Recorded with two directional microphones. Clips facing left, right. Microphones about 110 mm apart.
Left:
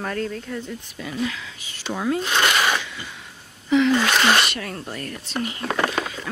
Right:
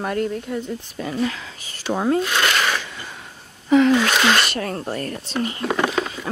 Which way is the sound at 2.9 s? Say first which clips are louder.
Right 1 dB; 40° right (ahead or behind).